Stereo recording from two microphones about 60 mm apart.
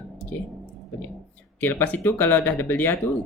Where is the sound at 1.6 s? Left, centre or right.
Left.